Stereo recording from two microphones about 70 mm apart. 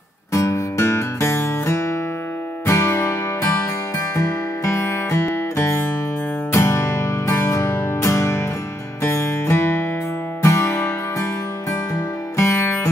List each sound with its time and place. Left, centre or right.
0.3 s music: left
3.0 s music: left
4.1 s music: left
6.5 s music: left